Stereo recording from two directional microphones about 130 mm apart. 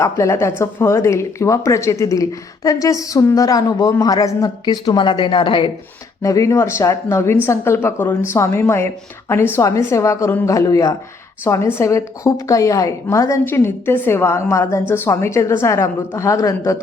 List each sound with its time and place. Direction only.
0.0 s a woman's voice: 20° left (ahead or behind); by 5.7 s 40° left (ahead or behind)
6.2 s a woman's voice: 25° left (ahead or behind)